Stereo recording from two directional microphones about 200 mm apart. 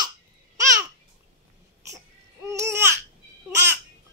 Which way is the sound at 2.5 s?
15° right (ahead or behind).